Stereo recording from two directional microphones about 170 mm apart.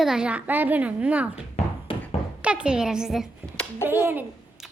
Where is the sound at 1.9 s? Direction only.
30° left (ahead or behind).